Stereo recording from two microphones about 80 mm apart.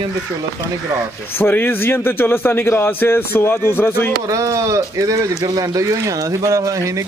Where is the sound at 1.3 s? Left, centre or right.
Left.